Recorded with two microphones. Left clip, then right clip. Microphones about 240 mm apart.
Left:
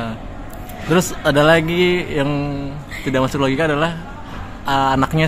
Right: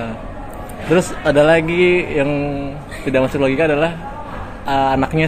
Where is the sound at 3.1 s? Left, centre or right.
Left.